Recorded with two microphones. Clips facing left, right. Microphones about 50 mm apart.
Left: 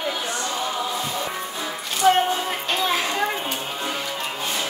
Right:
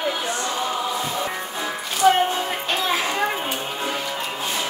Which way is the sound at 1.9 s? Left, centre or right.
Centre.